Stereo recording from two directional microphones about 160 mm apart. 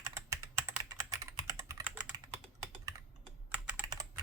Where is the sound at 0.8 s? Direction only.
20° right (ahead or behind).